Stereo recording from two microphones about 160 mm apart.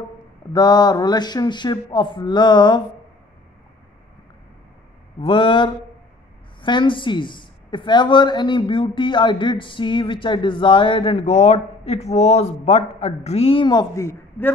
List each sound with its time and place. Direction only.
0.5 s speech: 25° left (ahead or behind)
5.2 s speech: 35° left (ahead or behind); by 14.5 s 20° left (ahead or behind)